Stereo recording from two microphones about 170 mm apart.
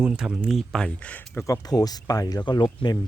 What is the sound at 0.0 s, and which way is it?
Speech, 5° right (ahead or behind).